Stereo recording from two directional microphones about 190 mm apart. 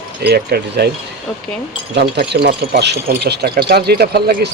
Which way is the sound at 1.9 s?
60° right (ahead or behind).